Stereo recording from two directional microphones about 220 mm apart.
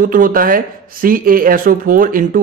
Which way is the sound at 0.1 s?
40° right (ahead or behind).